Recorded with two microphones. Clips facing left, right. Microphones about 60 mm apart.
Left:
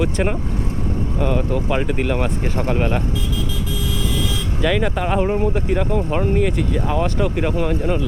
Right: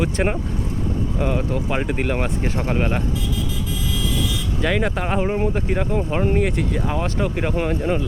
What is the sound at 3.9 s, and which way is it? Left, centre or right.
Vehicle, left.